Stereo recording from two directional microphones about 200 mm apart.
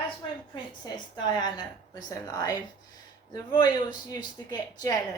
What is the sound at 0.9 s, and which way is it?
A woman's voice, 20° left (ahead or behind).